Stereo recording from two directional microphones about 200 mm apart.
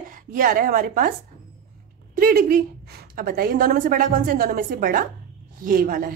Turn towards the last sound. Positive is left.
turn(degrees=-45)  # may be behind; listen again after turning